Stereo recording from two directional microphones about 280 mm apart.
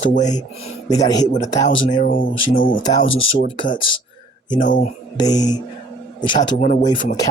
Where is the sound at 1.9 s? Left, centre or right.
Left.